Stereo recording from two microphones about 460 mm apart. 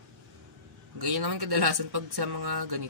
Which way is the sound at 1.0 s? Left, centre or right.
Right.